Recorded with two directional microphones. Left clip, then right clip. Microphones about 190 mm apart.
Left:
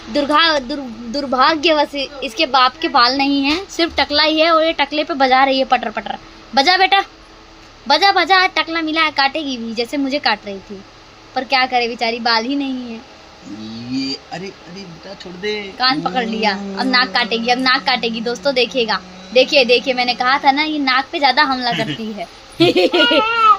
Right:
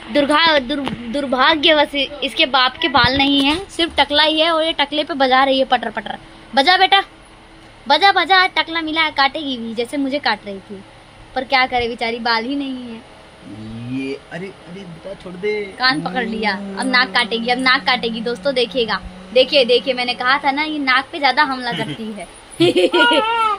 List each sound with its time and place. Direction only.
0.1 s a woman's voice: centre (ahead or behind)
1.1 s a woman's voice: 10° left (ahead or behind)
15.4 s speech: 10° right (ahead or behind)
15.8 s a woman's voice: 10° left (ahead or behind)